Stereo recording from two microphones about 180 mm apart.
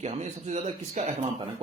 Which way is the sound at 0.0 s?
40° right (ahead or behind).